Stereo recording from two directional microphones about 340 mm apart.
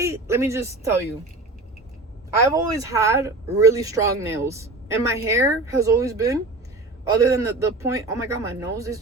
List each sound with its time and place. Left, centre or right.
0.0 s speech: centre
2.5 s speech: centre